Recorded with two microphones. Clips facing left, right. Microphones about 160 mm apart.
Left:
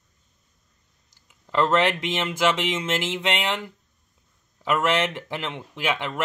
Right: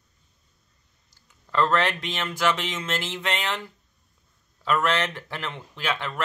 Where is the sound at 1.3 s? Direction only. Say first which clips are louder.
Left 1 dB; 15° left (ahead or behind).